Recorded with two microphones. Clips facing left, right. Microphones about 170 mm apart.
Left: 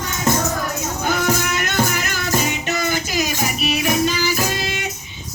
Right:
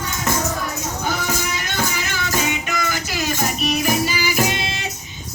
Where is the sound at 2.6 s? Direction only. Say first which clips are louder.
Left 3 dB; 30° left (ahead or behind).